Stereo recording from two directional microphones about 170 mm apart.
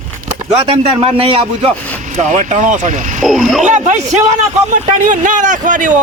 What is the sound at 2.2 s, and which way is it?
Speech, 45° right (ahead or behind).